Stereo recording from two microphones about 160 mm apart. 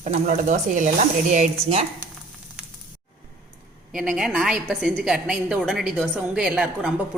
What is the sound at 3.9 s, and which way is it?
A woman's voice, 5° right (ahead or behind).